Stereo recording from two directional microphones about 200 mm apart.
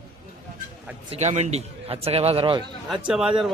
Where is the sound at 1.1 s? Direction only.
35° right (ahead or behind).